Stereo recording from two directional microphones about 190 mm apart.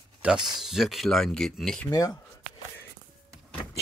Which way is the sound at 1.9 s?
20° left (ahead or behind).